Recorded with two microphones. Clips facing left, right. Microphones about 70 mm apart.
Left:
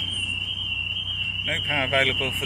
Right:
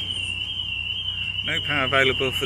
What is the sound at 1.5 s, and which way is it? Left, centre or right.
Speech, centre.